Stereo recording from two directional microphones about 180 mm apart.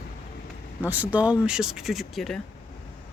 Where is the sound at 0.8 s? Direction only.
10° right (ahead or behind).